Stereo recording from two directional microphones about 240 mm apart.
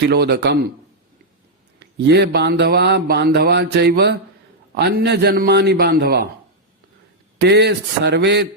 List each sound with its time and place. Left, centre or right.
0.1 s mantra: right
1.8 s mantra: right
7.3 s mantra: right